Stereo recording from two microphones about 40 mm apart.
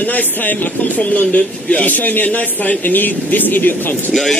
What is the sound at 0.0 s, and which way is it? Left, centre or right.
A man's voice, left.